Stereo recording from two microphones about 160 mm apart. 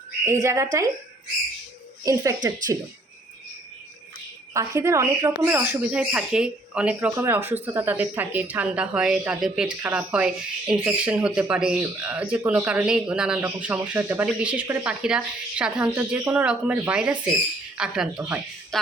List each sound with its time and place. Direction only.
0.4 s speech: 20° right (ahead or behind)
2.0 s speech: 25° right (ahead or behind)
4.5 s speech: 20° right (ahead or behind); by 18.8 s 5° right (ahead or behind)